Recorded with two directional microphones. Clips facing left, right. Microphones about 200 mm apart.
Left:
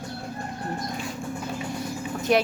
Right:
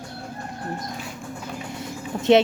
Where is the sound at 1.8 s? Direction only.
25° right (ahead or behind).